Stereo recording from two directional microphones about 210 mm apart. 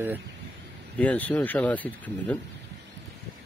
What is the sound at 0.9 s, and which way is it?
Speech, 5° left (ahead or behind).